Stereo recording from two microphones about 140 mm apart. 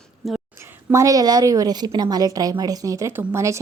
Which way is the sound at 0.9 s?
25° right (ahead or behind).